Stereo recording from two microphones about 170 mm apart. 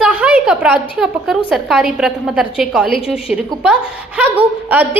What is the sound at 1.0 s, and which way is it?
A woman's voice, centre (ahead or behind).